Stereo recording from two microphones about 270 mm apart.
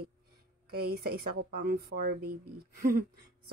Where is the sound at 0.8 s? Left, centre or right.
Right.